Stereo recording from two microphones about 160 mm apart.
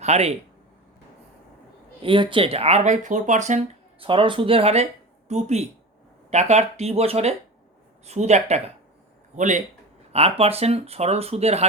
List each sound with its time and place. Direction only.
0.0 s speech: 40° right (ahead or behind)
2.0 s speech: 30° right (ahead or behind); by 3.6 s 50° right (ahead or behind)
4.0 s a man's voice: 30° right (ahead or behind); by 9.6 s 50° right (ahead or behind)
10.1 s speech: 40° right (ahead or behind)